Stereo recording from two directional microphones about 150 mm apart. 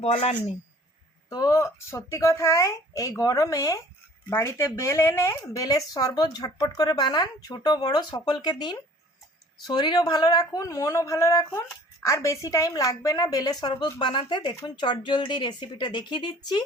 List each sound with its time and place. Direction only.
0.0 s speech: 40° left (ahead or behind)
1.3 s a woman's voice: 25° left (ahead or behind)